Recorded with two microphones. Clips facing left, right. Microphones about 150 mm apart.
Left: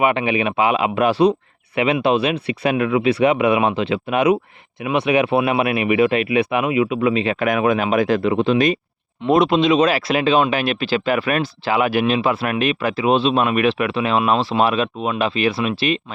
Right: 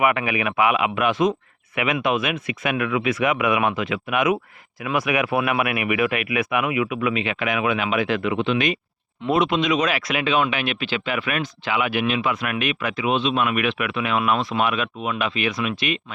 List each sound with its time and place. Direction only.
0.0 s speech: 25° left (ahead or behind)